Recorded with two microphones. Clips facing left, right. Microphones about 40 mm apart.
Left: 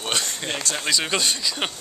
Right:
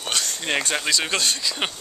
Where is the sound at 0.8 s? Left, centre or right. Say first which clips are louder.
Even; centre.